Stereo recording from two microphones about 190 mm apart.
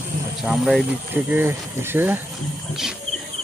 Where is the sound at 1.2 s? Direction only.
10° right (ahead or behind).